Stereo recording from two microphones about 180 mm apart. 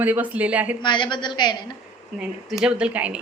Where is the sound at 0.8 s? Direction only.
25° left (ahead or behind).